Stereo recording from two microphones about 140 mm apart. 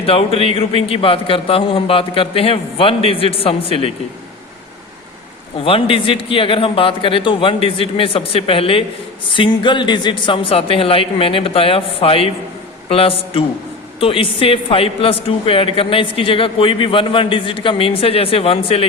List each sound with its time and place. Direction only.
0.0 s speech: 45° left (ahead or behind)
5.5 s a woman's voice: 40° left (ahead or behind)